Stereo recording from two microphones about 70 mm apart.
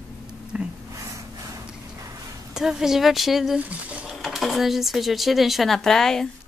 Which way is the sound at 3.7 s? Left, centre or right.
Centre.